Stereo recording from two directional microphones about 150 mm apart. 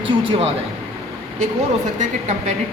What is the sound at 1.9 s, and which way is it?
Speech, 55° right (ahead or behind).